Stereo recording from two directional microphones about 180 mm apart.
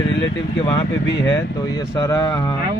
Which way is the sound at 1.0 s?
80° left.